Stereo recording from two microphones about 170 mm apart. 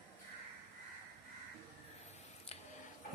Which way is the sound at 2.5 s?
35° left (ahead or behind).